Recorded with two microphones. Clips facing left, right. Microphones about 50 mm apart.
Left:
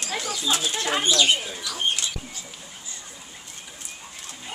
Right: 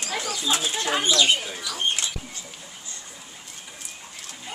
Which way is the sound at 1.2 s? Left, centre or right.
Right.